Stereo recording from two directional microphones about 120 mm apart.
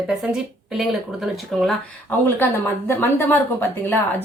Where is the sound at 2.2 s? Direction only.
20° left (ahead or behind).